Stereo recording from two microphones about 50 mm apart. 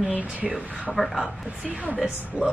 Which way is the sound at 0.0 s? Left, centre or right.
Right.